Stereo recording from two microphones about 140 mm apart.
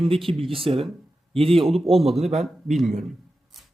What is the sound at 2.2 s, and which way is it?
Speech, 55° right (ahead or behind).